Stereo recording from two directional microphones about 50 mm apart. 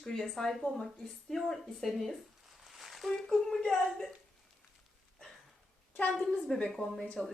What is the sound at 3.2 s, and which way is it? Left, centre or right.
Speech, centre.